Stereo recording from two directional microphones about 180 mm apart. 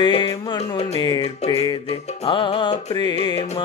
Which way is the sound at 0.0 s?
25° left (ahead or behind).